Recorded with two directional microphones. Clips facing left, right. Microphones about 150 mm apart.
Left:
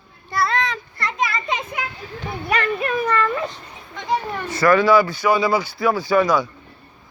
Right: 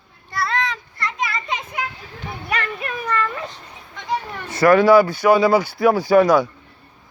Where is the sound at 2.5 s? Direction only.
30° left (ahead or behind).